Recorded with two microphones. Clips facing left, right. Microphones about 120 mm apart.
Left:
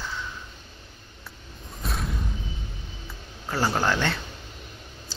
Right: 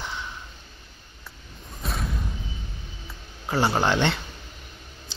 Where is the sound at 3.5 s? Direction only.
20° right (ahead or behind).